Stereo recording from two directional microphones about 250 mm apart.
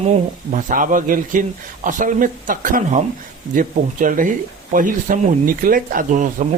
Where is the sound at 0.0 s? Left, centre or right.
Right.